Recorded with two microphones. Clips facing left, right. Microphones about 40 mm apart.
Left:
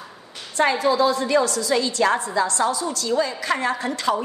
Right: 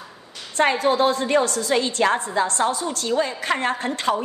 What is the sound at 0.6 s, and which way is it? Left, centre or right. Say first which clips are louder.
A woman's voice: even; right.